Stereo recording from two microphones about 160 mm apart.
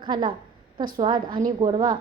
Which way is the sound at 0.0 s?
30° right (ahead or behind).